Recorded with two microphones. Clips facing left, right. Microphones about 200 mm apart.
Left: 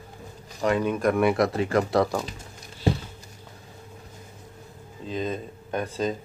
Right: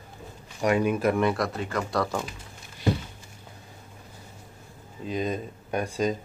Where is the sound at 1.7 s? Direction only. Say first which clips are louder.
Left 5 dB; 20° left (ahead or behind).